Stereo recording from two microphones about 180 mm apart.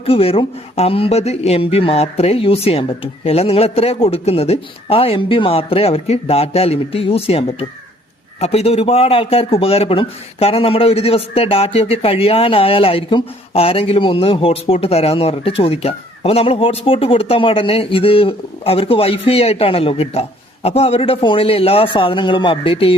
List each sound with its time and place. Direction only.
0.0 s a man's voice: 30° left (ahead or behind)